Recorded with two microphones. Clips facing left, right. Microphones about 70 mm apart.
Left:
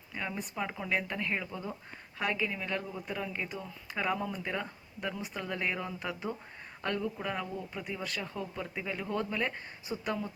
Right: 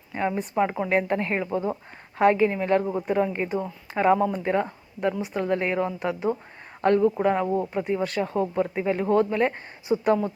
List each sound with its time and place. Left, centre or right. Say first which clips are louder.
0.1 s speech: right 12 dB; right
3.1 s speech: right 13 dB; right
6.8 s speech: right 14 dB; right
7.2 s speech: right 13 dB; right
7.4 s speech: right 15 dB; right
7.7 s speech: right 12 dB; right